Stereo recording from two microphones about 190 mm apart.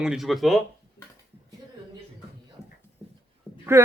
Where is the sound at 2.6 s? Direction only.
15° left (ahead or behind).